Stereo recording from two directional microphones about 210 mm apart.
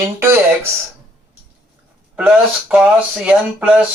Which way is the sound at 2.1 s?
5° right (ahead or behind).